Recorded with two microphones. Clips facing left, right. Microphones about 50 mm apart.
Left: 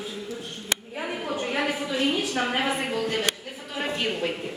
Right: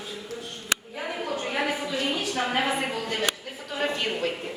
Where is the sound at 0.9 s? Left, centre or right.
Centre.